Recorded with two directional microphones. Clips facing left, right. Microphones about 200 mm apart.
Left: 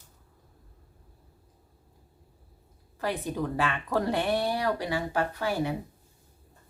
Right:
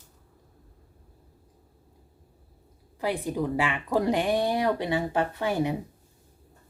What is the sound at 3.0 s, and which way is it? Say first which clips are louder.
Speech: right 2 dB; 15° right (ahead or behind).